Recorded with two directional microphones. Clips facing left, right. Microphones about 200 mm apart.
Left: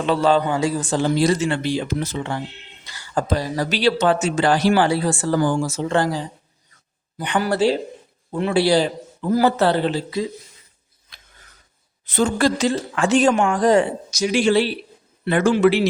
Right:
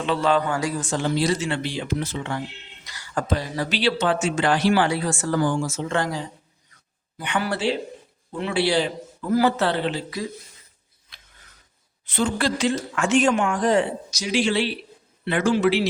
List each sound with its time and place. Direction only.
0.0 s speech: 40° left (ahead or behind)
0.4 s a man's voice: 20° left (ahead or behind)
0.8 s speech: 35° left (ahead or behind)
1.1 s speech: 45° left (ahead or behind)
11.1 s a sound: 40° left (ahead or behind)
12.0 s speech: 45° left (ahead or behind)